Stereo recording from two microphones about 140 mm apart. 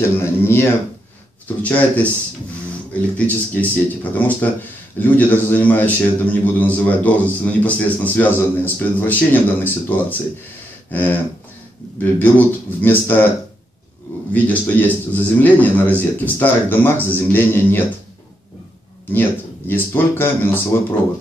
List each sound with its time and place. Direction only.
0.2 s a man's voice: 15° left (ahead or behind)
14.3 s speech: 10° left (ahead or behind)
19.7 s speech: 15° left (ahead or behind)